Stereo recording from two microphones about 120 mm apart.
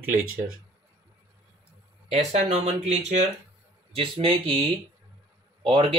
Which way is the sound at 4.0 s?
45° right (ahead or behind).